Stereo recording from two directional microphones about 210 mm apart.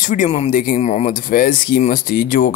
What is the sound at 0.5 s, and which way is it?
Speech, 40° left (ahead or behind).